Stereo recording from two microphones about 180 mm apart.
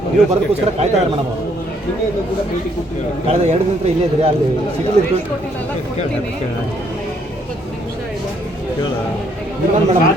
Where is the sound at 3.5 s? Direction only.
35° right (ahead or behind).